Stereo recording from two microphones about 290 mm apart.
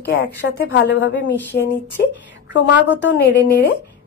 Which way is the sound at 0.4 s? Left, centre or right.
Left.